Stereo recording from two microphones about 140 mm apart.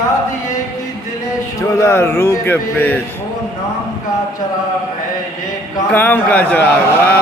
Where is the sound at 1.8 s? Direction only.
20° left (ahead or behind).